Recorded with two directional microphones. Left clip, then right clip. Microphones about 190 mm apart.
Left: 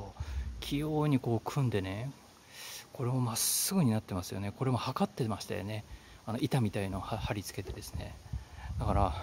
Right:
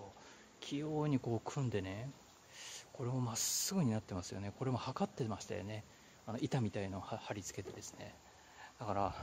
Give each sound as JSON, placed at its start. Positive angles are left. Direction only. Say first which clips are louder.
{"t": 0.6, "sound": "speech", "louder": "left 6 dB", "side_deg": 20}